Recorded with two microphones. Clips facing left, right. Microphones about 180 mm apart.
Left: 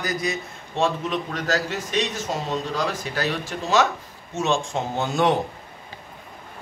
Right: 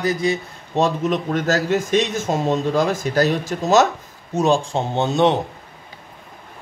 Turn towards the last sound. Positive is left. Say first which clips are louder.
# right 4 dB
turn(degrees=-25)  # may be behind; listen again after turning